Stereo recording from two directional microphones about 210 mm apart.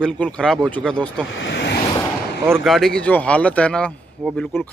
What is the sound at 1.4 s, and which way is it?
Vehicle, 55° left (ahead or behind).